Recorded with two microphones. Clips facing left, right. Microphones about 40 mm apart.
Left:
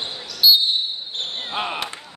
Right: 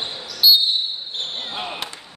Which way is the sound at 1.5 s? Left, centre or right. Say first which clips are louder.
Left 8 dB; left.